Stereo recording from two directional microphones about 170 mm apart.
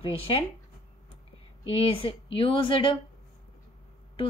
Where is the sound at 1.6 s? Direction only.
35° left (ahead or behind).